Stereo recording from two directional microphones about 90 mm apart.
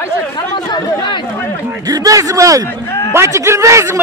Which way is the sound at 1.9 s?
40° right (ahead or behind).